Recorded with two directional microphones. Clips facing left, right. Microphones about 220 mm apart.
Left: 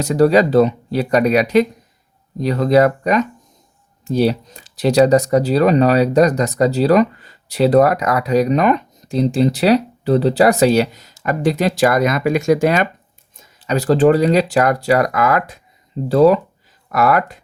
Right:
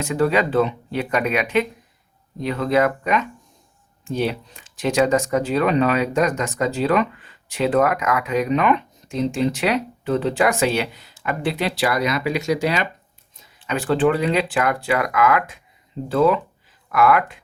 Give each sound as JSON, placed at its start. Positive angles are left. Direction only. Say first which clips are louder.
{"t": 0.0, "sound": "speech", "louder": "left 7 dB", "side_deg": 40}